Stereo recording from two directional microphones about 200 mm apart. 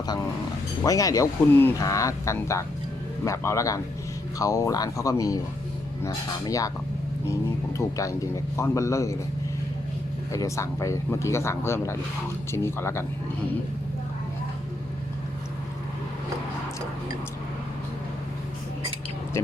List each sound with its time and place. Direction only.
0.9 s speech: 15° left (ahead or behind)
7.8 s speech: 15° left (ahead or behind)
10.3 s speech: 15° left (ahead or behind)